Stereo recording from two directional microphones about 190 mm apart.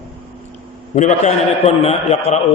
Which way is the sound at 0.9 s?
40° left (ahead or behind).